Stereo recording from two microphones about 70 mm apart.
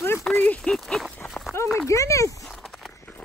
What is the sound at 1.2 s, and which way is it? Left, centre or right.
Run, centre.